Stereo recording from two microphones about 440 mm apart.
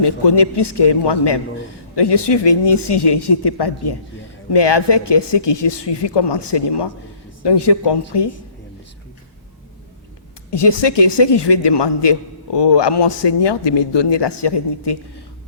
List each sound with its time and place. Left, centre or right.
0.0 s a man's voice: left
10.5 s a man's voice: left